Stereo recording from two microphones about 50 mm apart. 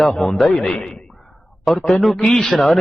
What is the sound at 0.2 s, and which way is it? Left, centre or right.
Speech, centre.